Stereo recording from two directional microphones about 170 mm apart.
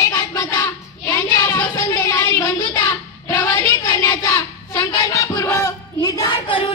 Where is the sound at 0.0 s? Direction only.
15° left (ahead or behind).